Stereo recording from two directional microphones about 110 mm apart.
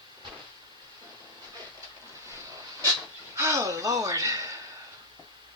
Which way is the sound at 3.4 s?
25° right (ahead or behind).